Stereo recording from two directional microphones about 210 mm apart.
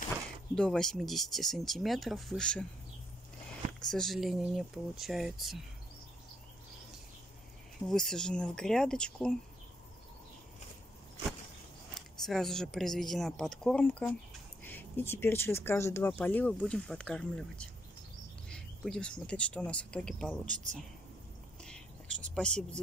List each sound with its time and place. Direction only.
0.6 s speech: 5° left (ahead or behind)
3.8 s speech: centre (ahead or behind)
7.9 s speech: centre (ahead or behind)
11.9 s speech: centre (ahead or behind)
20.4 s speech: 35° right (ahead or behind)
21.6 s a sound: 5° left (ahead or behind)